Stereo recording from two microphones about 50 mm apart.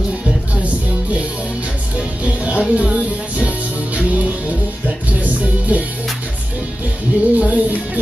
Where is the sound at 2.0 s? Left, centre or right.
Right.